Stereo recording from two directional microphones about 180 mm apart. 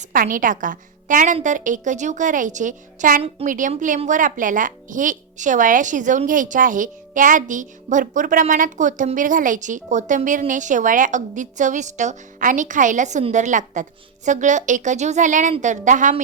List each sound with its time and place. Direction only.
0.0 s a woman's voice: 50° right (ahead or behind)